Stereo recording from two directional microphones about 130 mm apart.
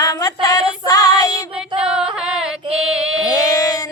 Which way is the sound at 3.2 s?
25° left (ahead or behind).